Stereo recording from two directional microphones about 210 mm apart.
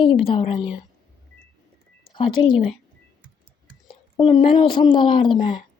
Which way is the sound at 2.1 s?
25° left (ahead or behind).